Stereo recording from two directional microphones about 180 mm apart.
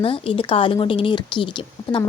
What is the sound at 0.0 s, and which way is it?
A woman's voice, 30° left (ahead or behind).